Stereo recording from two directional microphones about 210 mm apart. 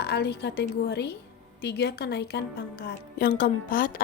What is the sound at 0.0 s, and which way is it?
A woman's voice, 50° left (ahead or behind).